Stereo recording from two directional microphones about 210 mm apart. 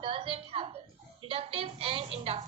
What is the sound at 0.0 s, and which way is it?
A woman's voice, 25° right (ahead or behind).